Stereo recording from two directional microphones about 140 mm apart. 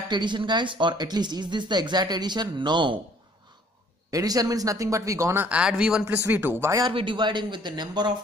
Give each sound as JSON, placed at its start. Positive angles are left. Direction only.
{"t": 0.1, "sound": "speech", "side_deg": -35}
{"t": 4.1, "sound": "speech", "side_deg": -25}
{"t": 6.8, "sound": "speech", "side_deg": -35}